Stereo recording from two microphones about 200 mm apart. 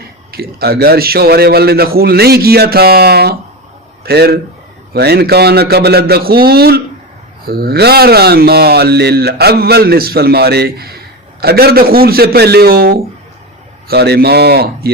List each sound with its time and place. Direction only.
0.3 s speech: 50° right (ahead or behind)